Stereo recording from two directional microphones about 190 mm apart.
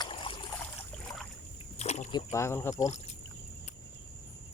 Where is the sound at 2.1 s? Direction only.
15° left (ahead or behind).